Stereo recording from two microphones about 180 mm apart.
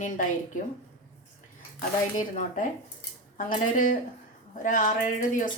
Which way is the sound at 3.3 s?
50° left (ahead or behind).